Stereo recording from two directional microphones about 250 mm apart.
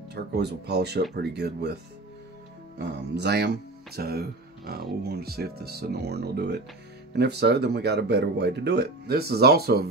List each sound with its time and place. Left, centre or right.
0.1 s speech: right
2.8 s speech: right